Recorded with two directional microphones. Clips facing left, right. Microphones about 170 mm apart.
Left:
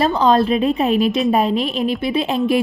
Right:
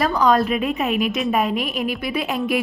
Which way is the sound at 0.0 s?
25° left (ahead or behind).